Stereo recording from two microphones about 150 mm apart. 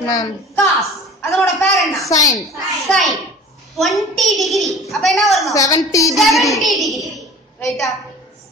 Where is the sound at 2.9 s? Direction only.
Centre (ahead or behind).